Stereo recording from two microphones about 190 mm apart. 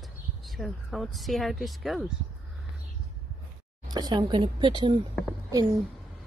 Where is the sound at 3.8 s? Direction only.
20° right (ahead or behind).